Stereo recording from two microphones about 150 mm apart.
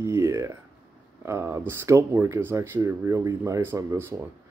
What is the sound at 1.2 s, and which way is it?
Speech, 20° right (ahead or behind).